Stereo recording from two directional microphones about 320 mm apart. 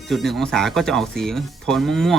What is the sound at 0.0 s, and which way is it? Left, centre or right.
Speech, centre.